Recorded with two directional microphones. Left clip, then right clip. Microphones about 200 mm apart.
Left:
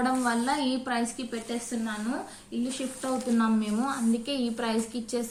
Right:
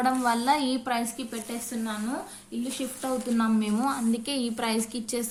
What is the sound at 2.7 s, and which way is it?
A woman's voice, 35° right (ahead or behind).